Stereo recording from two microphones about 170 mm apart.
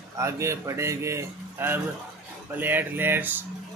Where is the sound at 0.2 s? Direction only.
15° right (ahead or behind).